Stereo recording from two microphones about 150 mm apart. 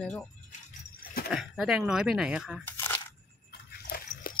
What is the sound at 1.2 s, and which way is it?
Speech, 5° right (ahead or behind).